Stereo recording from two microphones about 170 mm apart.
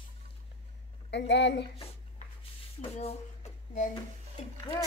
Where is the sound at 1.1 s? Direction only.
90° left.